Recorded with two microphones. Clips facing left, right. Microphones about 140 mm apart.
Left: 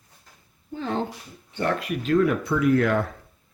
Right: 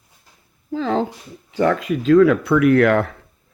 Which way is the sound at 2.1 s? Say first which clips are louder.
Right 8 dB; 90° right.